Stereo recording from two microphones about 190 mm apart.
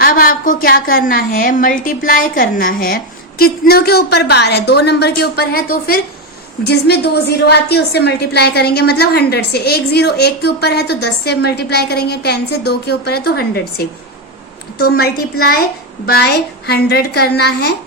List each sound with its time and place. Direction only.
0.0 s a woman's voice: 50° left (ahead or behind)